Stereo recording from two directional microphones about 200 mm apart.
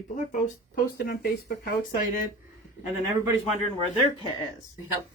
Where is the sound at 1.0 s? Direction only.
50° left (ahead or behind).